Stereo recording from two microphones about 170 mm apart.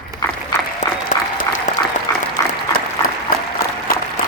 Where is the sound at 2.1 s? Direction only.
20° left (ahead or behind).